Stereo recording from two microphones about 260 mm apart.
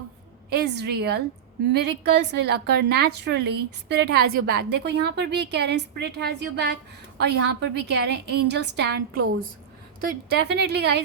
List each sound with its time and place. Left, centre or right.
0.5 s a woman's voice: right
10.3 s a woman's voice: right